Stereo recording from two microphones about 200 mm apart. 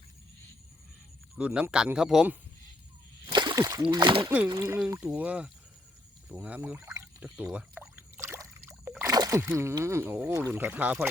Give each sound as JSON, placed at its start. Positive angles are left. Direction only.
{"t": 1.4, "sound": "speech", "side_deg": -5}
{"t": 3.2, "sound": "speech", "side_deg": -20}
{"t": 6.2, "sound": "a sound", "side_deg": -5}
{"t": 8.9, "sound": "speech", "side_deg": -15}